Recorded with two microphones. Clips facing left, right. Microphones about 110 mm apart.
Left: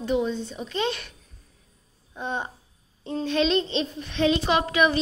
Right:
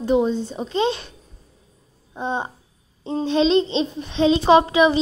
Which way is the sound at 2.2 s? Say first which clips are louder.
Right 5 dB; 25° right (ahead or behind).